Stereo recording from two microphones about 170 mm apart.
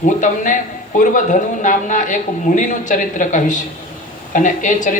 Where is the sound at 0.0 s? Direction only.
50° left (ahead or behind).